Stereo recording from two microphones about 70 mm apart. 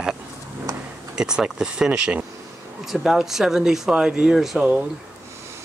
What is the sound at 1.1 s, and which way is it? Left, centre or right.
Speech, centre.